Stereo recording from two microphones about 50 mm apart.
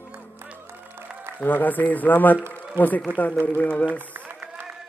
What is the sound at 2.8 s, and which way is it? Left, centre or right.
Speech, right.